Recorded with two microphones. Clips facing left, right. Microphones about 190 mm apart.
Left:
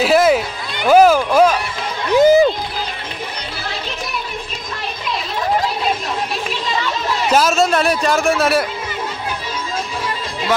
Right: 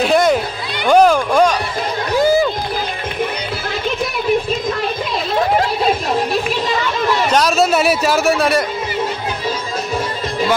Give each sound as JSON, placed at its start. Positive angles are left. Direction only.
{"t": 0.0, "sound": "a sound", "side_deg": 5}
{"t": 0.8, "sound": "speech", "side_deg": 5}
{"t": 2.1, "sound": "run", "side_deg": 20}
{"t": 7.2, "sound": "a man's voice", "side_deg": 5}